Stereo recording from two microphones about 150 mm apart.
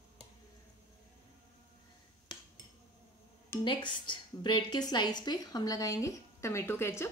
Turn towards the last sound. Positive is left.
turn(degrees=15)  # may be behind; listen again after turning